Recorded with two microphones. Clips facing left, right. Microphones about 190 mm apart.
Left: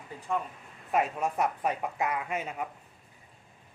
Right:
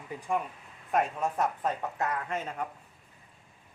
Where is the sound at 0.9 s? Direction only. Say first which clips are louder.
Even; 5° left (ahead or behind).